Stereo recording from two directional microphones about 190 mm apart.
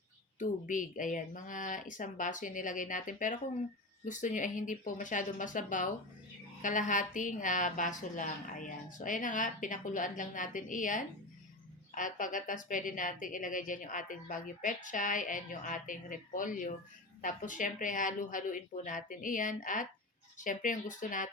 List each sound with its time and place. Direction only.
0.3 s a woman's voice: 45° left (ahead or behind)